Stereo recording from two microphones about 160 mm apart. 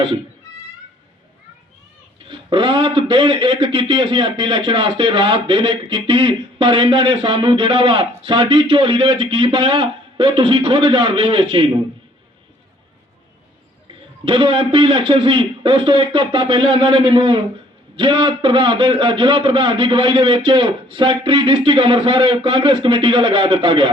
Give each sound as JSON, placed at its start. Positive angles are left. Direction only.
{"t": 2.3, "sound": "speech", "side_deg": -30}
{"t": 14.3, "sound": "speech", "side_deg": -35}